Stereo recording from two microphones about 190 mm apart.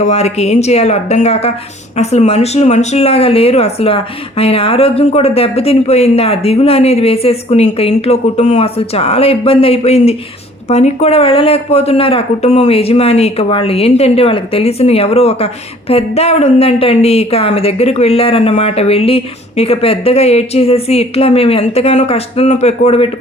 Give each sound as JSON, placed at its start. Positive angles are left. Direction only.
{"t": 0.0, "sound": "speech", "side_deg": 35}